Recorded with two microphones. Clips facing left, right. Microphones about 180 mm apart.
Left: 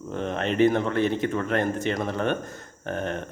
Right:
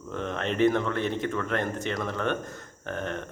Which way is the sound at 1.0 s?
5° left (ahead or behind).